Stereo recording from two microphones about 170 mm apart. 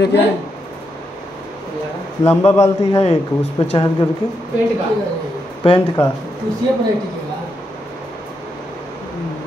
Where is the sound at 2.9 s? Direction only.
35° left (ahead or behind).